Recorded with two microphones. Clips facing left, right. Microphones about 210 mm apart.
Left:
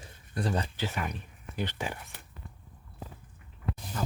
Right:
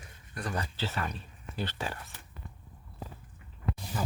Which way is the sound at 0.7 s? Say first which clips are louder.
Left 1 dB; 15° left (ahead or behind).